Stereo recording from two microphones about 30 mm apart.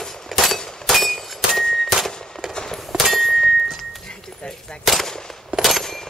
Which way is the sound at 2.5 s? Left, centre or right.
Centre.